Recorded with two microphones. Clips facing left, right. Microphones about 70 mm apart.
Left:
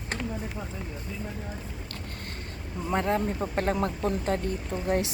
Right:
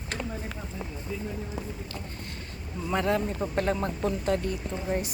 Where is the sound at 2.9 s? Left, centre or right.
Left.